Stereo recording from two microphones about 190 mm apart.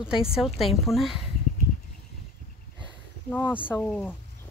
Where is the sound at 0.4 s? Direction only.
Centre (ahead or behind).